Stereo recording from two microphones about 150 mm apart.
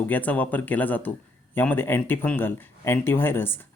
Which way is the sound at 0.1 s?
10° left (ahead or behind).